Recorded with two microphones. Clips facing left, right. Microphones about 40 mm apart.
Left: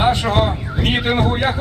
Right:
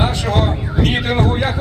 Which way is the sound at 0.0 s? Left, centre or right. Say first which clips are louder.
Left 2 dB; centre.